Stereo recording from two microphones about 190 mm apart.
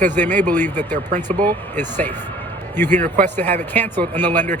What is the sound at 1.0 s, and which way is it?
Speech, 40° right (ahead or behind).